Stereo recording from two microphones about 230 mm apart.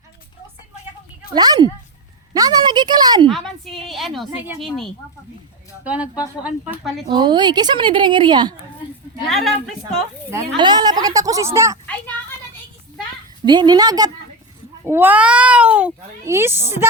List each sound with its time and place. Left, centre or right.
1.3 s a woman's voice: centre
3.2 s a woman's voice: centre
7.1 s a woman's voice: centre
9.3 s a woman's voice: centre
10.3 s a woman's voice: centre
13.4 s a woman's voice: centre